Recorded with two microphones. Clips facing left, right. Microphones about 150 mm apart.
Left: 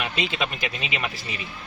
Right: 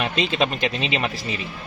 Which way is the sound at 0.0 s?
35° right (ahead or behind).